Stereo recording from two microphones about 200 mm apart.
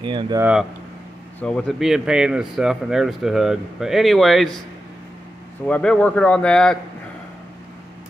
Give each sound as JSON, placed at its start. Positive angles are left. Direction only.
{"t": 0.0, "sound": "speech", "side_deg": -25}
{"t": 0.4, "sound": "speech", "side_deg": -5}
{"t": 1.4, "sound": "speech", "side_deg": 5}
{"t": 5.7, "sound": "speech", "side_deg": 5}